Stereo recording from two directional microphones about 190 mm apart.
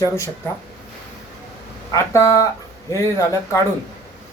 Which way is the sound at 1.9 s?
15° left (ahead or behind).